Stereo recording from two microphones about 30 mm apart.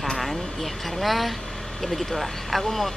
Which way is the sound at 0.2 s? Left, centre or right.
Centre.